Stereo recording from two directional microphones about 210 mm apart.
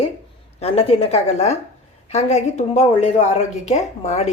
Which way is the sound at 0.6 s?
30° left (ahead or behind).